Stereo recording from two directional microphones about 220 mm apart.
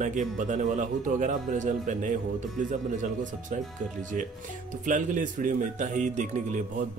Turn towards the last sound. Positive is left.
turn(degrees=-35)  # may be behind; listen again after turning